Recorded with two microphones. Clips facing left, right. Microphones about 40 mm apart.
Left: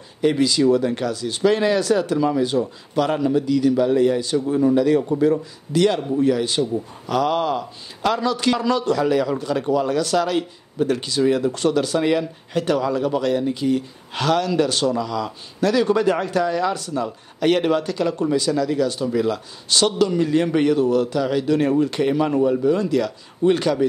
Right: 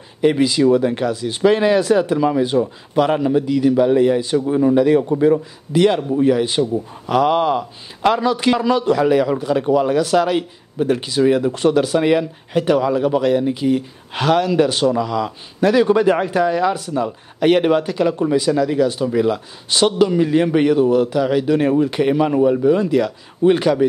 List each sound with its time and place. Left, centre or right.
0.2 s a man's voice: right